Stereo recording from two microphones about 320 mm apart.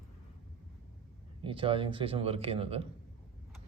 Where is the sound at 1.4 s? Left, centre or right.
Centre.